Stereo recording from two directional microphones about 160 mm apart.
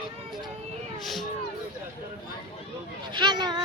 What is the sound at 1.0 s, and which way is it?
Music, centre (ahead or behind).